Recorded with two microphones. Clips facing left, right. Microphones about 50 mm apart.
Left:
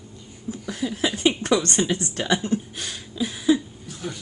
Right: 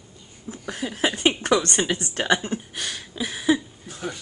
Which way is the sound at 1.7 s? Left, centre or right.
Right.